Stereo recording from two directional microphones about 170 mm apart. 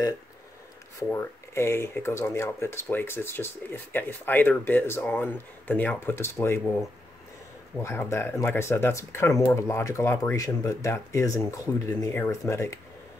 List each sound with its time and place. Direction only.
1.1 s speech: 15° left (ahead or behind)
7.7 s speech: 15° left (ahead or behind)